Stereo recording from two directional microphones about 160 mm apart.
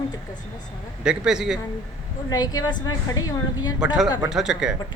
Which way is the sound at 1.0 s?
5° right (ahead or behind).